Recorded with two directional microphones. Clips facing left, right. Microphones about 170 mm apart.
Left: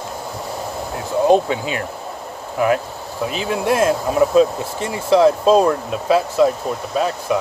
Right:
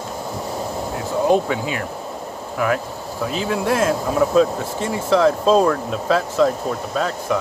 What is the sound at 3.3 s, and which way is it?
Speech, 20° left (ahead or behind).